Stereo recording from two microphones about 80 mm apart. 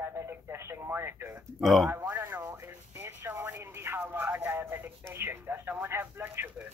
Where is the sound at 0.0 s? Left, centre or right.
Right.